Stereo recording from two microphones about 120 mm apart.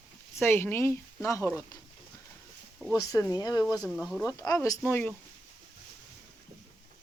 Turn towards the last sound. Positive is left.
turn(degrees=15)  # may be behind; listen again after turning